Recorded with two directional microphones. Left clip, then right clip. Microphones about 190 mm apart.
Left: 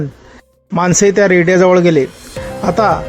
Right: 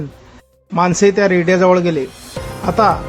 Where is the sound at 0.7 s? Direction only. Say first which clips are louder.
Left 1 dB; 20° left (ahead or behind).